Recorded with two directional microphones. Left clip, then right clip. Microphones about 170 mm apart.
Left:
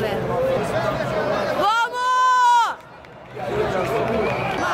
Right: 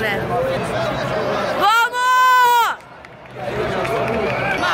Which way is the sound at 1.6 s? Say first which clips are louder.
Right 6 dB; centre (ahead or behind).